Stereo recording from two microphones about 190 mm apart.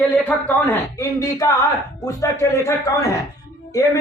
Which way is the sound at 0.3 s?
10° left (ahead or behind).